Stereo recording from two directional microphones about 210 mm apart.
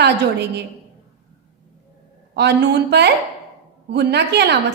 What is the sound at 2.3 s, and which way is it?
A woman's voice, 55° right (ahead or behind).